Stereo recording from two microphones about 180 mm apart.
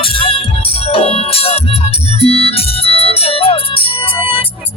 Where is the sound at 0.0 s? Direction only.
30° left (ahead or behind).